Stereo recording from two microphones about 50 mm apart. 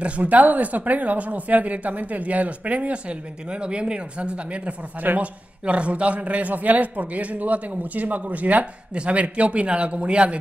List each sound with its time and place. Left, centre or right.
0.0 s a man's voice: right